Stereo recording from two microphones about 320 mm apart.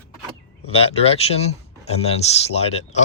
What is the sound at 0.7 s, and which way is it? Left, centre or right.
Speech, centre.